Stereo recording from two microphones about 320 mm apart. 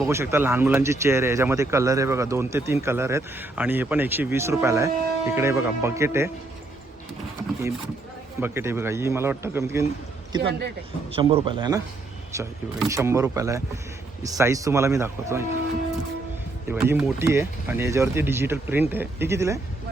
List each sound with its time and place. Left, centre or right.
0.0 s speech: centre
8.4 s speech: centre
16.6 s speech: centre